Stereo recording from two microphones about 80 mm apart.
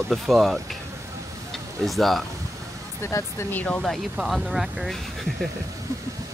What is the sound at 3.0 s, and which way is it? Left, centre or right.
Speech, left.